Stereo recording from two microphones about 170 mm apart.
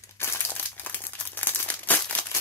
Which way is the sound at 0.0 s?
15° left (ahead or behind).